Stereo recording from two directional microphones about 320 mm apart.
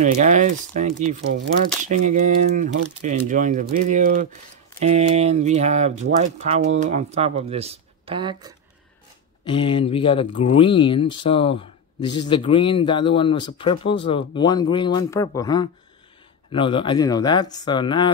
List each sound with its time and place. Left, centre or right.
0.0 s speech: right
9.4 s speech: centre